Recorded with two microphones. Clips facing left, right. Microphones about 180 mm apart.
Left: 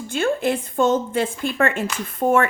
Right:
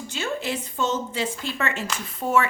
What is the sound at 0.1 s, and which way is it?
A woman's voice, 55° left (ahead or behind).